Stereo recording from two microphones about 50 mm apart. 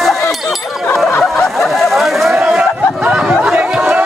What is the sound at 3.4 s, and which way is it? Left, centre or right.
Chatter, right.